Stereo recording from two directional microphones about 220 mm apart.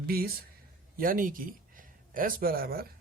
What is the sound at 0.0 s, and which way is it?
A man's voice, 45° right (ahead or behind).